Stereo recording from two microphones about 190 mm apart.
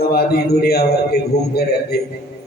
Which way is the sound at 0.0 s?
55° left (ahead or behind).